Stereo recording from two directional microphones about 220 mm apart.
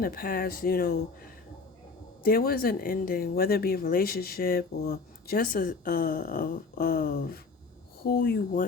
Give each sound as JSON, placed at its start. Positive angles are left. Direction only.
{"t": 0.0, "sound": "speech", "side_deg": 40}
{"t": 2.2, "sound": "speech", "side_deg": 40}